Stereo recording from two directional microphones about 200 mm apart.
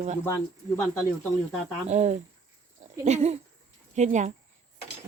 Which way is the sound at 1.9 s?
35° right (ahead or behind).